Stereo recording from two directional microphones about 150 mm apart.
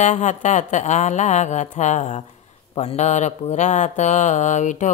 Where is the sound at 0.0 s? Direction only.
55° left (ahead or behind).